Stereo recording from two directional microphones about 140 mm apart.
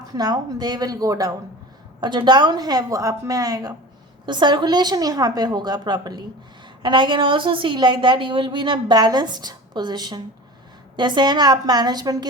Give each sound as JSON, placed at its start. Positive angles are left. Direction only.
{"t": 0.1, "sound": "a woman's voice", "side_deg": -30}